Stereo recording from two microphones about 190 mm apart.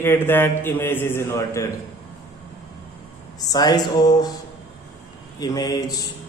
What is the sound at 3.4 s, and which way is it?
Speech, 20° left (ahead or behind).